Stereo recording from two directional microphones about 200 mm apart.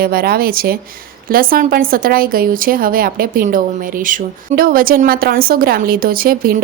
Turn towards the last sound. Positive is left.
turn(degrees=-45)  # may be behind; listen again after turning